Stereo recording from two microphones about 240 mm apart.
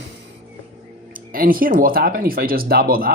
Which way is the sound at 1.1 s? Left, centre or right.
Right.